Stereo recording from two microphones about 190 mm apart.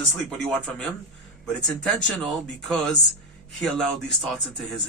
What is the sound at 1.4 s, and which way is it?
Speech, centre (ahead or behind).